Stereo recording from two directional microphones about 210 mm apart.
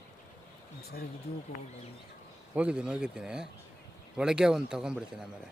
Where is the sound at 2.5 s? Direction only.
5° right (ahead or behind).